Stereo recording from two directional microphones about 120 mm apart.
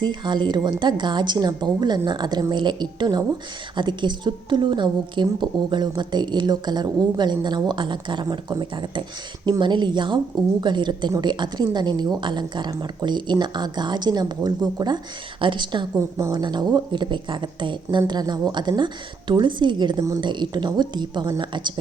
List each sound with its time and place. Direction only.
0.0 s a woman's voice: 40° right (ahead or behind)
16.0 s a woman's voice: 25° right (ahead or behind)